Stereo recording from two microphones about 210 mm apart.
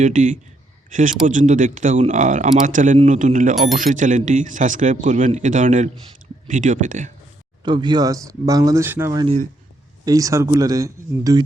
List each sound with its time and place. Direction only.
0.0 s speech: 35° right (ahead or behind)
7.6 s speech: 20° right (ahead or behind)
9.2 s speech: 30° right (ahead or behind)
10.1 s speech: 15° right (ahead or behind)